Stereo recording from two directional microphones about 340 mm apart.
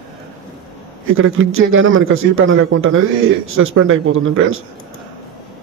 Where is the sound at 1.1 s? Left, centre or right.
Right.